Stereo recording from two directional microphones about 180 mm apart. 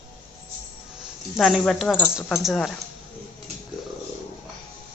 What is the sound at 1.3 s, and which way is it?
Speech, centre (ahead or behind).